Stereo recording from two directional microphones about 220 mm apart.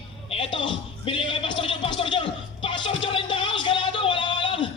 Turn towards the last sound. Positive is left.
turn(degrees=20)  # may be behind; listen again after turning